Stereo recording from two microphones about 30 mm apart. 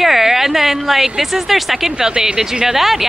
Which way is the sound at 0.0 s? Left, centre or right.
Centre.